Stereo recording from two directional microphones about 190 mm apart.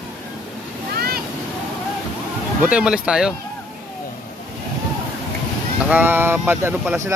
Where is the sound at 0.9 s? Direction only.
55° right (ahead or behind).